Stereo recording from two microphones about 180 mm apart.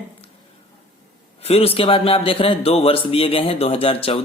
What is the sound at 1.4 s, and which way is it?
A man's voice, 35° left (ahead or behind).